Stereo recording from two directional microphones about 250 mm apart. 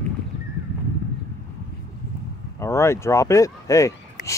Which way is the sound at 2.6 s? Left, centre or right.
Centre.